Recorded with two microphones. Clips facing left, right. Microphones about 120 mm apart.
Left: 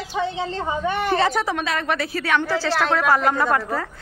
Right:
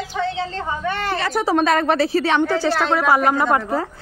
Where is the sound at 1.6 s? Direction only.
40° right (ahead or behind).